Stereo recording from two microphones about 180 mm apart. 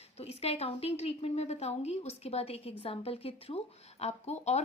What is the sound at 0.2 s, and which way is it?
Speech, 35° left (ahead or behind).